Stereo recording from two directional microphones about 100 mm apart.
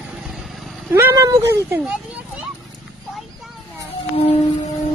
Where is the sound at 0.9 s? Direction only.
30° right (ahead or behind).